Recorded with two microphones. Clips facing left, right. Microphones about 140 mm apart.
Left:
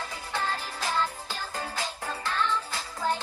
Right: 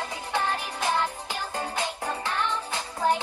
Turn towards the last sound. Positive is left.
turn(degrees=-20)  # may be behind; listen again after turning